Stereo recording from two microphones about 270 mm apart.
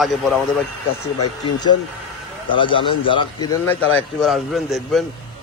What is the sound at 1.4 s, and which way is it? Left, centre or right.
A man's voice, centre.